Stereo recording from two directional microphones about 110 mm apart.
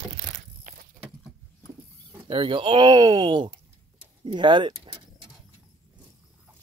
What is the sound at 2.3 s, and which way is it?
Speech, 50° right (ahead or behind).